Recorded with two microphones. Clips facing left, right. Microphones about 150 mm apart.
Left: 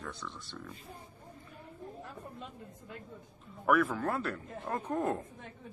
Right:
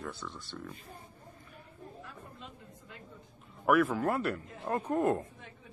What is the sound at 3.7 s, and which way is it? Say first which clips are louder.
Speech: right 2 dB; 5° right (ahead or behind).